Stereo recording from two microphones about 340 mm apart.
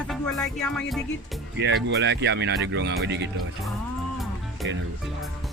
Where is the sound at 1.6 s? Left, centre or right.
Right.